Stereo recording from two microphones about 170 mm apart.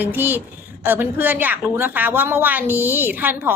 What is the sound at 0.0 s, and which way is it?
A woman's voice, 10° right (ahead or behind).